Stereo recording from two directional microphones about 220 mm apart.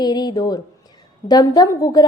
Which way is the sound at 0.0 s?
20° left (ahead or behind).